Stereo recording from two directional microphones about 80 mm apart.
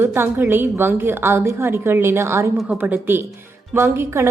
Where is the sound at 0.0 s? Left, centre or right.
Right.